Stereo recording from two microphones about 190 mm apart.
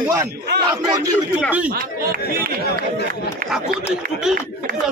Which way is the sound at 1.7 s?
50° right (ahead or behind).